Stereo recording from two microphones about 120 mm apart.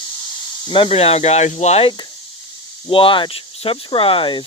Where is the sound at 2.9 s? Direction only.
45° left (ahead or behind).